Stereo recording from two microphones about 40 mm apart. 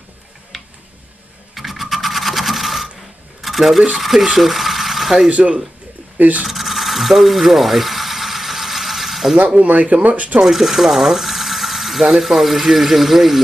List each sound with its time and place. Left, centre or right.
1.5 s sewing machine: centre
3.4 s speech: centre
6.1 s speech: right
6.4 s mechanisms: centre
9.6 s speech: right
10.4 s speech: centre